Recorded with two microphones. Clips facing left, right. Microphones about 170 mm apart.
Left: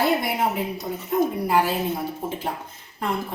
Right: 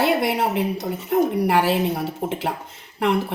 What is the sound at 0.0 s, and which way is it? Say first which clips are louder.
A woman's voice: right 2 dB; 75° right (ahead or behind).